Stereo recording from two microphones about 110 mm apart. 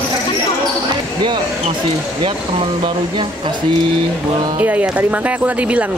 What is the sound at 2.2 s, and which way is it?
Speech, 50° right (ahead or behind).